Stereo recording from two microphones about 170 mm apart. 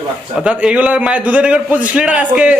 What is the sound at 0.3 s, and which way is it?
Speech, 5° right (ahead or behind).